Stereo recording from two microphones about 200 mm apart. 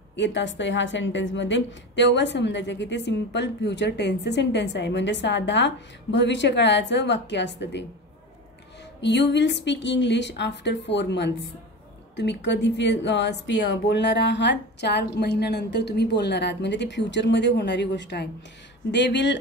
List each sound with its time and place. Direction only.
0.1 s a woman's voice: 65° left (ahead or behind)
9.0 s a woman's voice: 60° left (ahead or behind)